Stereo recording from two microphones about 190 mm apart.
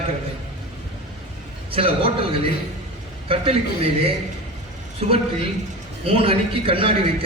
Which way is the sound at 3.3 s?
30° right (ahead or behind).